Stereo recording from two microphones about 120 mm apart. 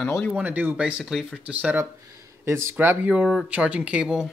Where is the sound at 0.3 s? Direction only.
10° right (ahead or behind).